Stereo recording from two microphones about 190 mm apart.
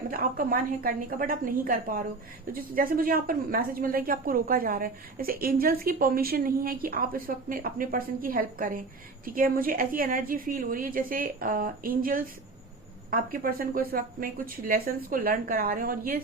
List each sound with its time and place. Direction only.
0.1 s a woman's voice: 50° right (ahead or behind)